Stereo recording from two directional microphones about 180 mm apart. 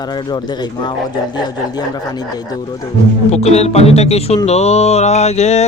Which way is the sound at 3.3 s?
35° left (ahead or behind).